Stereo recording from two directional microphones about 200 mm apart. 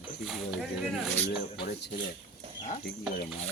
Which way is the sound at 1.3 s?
55° left (ahead or behind).